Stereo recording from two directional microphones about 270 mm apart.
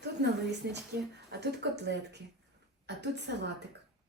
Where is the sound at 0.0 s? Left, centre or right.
Right.